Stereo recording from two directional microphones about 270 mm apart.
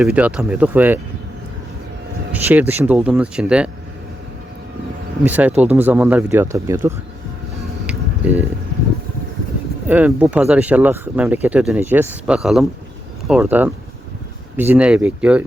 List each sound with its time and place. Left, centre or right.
0.0 s speech: centre
2.3 s speech: centre
5.2 s speech: centre
7.9 s a sound: centre
9.8 s speech: centre